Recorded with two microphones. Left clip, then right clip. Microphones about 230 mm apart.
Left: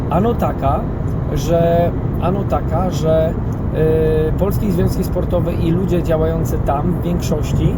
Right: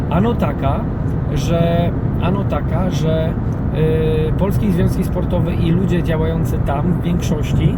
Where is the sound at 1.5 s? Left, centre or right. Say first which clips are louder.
Left 4 dB; centre.